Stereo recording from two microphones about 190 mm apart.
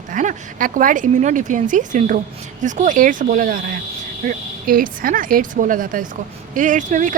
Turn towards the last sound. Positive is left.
turn(degrees=-40)  # may be behind; listen again after turning